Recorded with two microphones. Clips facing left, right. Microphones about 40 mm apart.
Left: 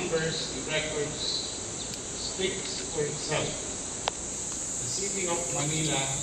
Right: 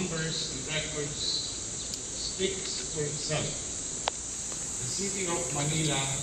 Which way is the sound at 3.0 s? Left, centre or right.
Centre.